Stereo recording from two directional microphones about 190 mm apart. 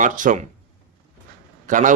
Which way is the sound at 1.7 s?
45° right (ahead or behind).